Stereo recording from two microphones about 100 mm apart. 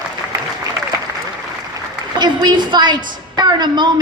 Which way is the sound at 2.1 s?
50° right (ahead or behind).